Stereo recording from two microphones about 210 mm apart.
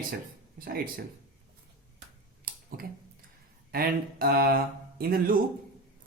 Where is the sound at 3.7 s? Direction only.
45° right (ahead or behind).